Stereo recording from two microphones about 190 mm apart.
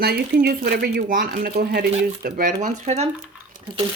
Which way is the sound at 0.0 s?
50° right (ahead or behind).